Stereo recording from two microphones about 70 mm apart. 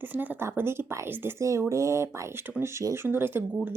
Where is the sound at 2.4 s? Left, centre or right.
Right.